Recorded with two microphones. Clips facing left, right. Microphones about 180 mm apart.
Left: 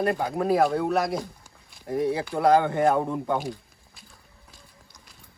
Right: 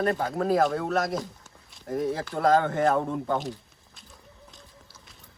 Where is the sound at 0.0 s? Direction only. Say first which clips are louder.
Left 1 dB; 10° left (ahead or behind).